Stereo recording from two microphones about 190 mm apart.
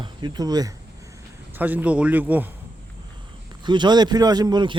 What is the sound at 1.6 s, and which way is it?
Speech, 10° right (ahead or behind).